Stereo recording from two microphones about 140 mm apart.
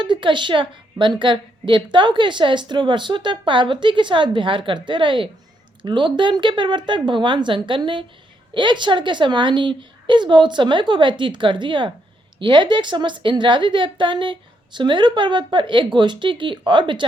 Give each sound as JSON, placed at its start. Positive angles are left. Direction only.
{"t": 0.0, "sound": "a woman's voice", "side_deg": -35}